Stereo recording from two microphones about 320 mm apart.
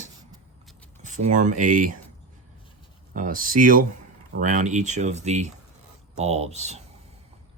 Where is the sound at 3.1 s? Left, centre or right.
Right.